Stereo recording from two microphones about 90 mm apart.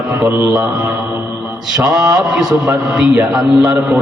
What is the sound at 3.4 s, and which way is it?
Speech, 45° right (ahead or behind).